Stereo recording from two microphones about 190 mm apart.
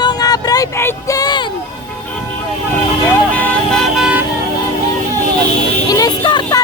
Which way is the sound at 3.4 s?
Centre (ahead or behind).